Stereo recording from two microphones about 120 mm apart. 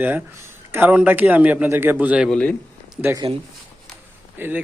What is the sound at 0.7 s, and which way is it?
A man's voice, 15° right (ahead or behind).